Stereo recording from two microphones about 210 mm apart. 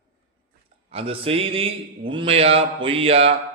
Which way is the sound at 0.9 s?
25° right (ahead or behind).